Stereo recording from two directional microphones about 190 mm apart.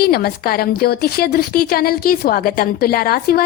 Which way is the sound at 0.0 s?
55° left (ahead or behind).